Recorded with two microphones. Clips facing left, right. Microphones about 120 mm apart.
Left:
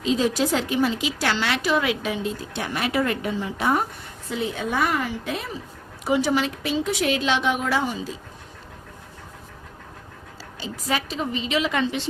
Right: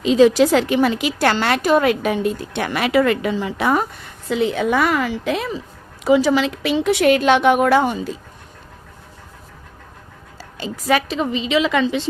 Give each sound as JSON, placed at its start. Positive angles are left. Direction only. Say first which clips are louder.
{"t": 0.0, "sound": "a woman's voice", "louder": "right 9 dB", "side_deg": -85}
{"t": 10.6, "sound": "a woman's voice", "louder": "right 8 dB", "side_deg": -70}